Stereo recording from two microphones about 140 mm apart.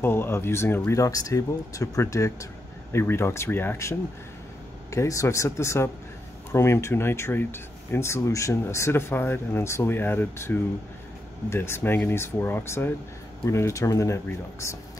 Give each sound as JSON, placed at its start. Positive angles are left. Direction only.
{"t": 0.0, "sound": "speech", "side_deg": 15}
{"t": 4.9, "sound": "speech", "side_deg": 25}